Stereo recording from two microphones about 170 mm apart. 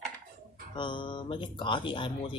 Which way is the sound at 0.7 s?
30° left (ahead or behind).